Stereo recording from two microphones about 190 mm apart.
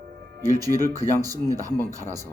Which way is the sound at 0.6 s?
20° right (ahead or behind).